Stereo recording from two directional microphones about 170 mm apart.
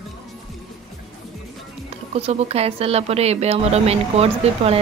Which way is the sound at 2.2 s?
35° right (ahead or behind).